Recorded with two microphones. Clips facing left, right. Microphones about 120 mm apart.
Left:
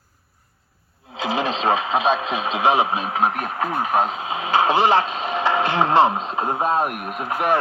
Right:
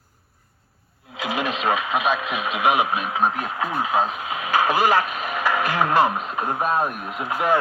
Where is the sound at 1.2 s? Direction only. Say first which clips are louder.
Left 2 dB; 30° left (ahead or behind).